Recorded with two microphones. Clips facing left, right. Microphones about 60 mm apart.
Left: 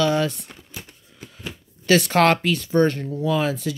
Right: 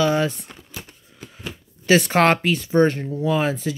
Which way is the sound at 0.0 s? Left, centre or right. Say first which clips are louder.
Right 1 dB; right.